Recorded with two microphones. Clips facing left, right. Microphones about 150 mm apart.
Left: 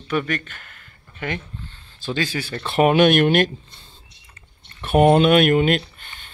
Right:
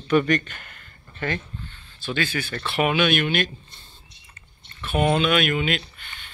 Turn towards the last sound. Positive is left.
turn(degrees=50)  # may be behind; listen again after turning